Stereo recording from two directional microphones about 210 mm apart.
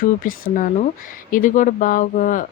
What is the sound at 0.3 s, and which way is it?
A woman's voice, 40° left (ahead or behind).